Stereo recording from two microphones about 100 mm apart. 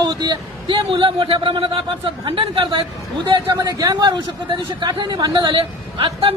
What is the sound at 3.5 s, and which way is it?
A man's voice, 40° right (ahead or behind).